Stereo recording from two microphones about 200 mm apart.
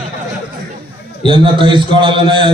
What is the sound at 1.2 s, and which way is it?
A man's voice, 25° right (ahead or behind).